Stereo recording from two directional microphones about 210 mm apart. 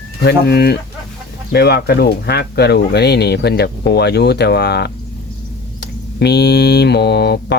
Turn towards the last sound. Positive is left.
turn(degrees=50)  # may be behind; listen again after turning